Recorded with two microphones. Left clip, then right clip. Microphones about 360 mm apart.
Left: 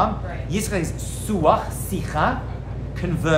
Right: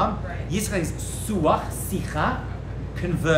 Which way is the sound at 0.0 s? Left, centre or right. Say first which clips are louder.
Left 3 dB; centre.